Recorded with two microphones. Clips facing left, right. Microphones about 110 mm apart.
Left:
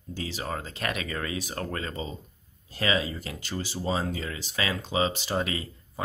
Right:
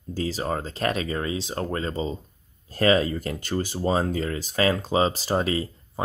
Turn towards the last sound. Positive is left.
turn(degrees=-35)  # may be behind; listen again after turning